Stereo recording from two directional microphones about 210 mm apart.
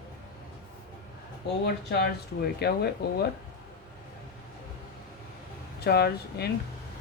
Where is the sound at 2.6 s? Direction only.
50° left (ahead or behind).